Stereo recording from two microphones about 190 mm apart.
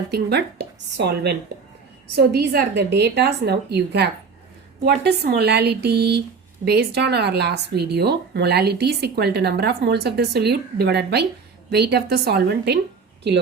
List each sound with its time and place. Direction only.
0.1 s speech: 60° right (ahead or behind)